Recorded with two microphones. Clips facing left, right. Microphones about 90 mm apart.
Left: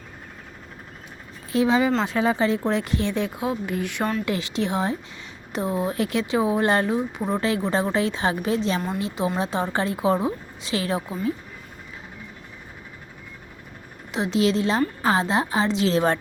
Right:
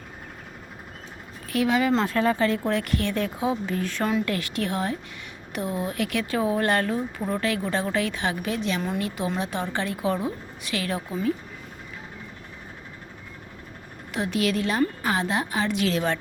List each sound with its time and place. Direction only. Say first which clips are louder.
1.5 s speech: left 3 dB; 25° left (ahead or behind)
2.1 s speech: left 1 dB; 15° left (ahead or behind)
3.2 s speech: even; 5° left (ahead or behind)
4.3 s speech: left 2 dB; 20° left (ahead or behind)
14.1 s speech: left 3 dB; 25° left (ahead or behind)